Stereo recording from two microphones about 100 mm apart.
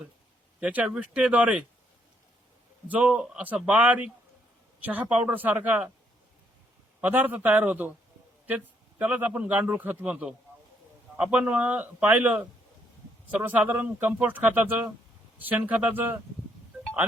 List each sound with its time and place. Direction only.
0.6 s a man's voice: 15° right (ahead or behind)
2.9 s a man's voice: 15° right (ahead or behind)
7.0 s a man's voice: 15° right (ahead or behind)